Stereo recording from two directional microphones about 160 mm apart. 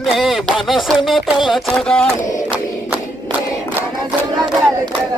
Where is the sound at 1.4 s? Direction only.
Centre (ahead or behind).